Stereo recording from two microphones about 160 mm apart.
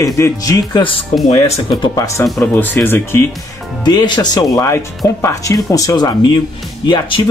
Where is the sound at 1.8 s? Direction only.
20° left (ahead or behind).